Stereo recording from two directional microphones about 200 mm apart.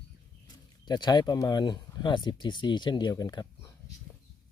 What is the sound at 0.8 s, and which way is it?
Speech, 20° left (ahead or behind).